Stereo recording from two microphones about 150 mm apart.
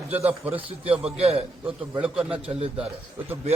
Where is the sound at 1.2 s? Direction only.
40° right (ahead or behind).